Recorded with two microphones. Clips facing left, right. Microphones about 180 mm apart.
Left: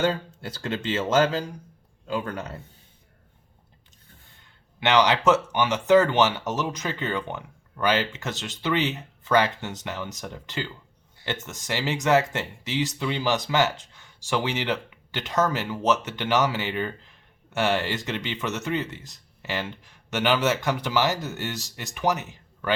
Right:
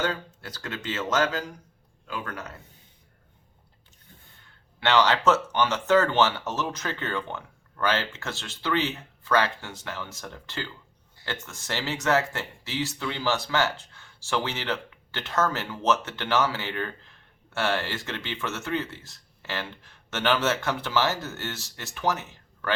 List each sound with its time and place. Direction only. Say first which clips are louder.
0.4 s speech: left 5 dB; 30° left (ahead or behind)
4.8 s speech: left 2 dB; 15° left (ahead or behind)